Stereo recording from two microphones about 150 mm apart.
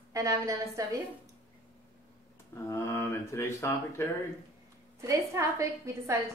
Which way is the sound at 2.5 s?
20° left (ahead or behind).